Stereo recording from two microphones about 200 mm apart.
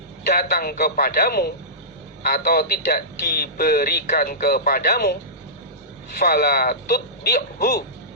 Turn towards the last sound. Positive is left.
turn(degrees=50)  # may be behind; listen again after turning